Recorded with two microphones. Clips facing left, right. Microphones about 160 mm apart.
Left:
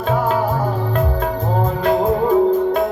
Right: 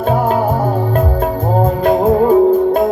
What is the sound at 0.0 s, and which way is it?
Music, 40° right (ahead or behind).